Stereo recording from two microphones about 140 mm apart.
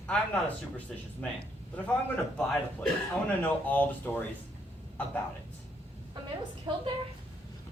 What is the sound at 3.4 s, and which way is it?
Speech, 10° left (ahead or behind).